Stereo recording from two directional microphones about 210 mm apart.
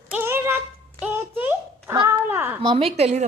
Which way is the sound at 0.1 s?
10° right (ahead or behind).